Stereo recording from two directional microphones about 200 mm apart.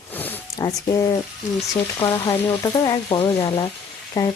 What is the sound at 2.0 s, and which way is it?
Speech, 20° left (ahead or behind).